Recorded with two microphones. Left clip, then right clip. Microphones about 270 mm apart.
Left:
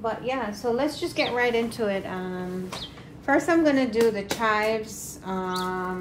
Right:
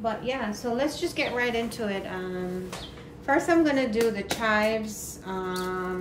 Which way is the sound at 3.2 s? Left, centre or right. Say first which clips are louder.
Left 1 dB; left.